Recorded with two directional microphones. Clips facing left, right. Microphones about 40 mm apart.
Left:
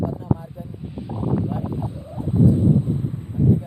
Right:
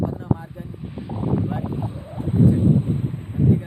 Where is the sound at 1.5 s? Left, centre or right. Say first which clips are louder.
Even; right.